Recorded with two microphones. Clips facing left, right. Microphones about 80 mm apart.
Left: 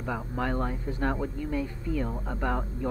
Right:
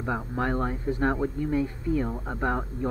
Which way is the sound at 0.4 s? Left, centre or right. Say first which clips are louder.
Right 2 dB; right.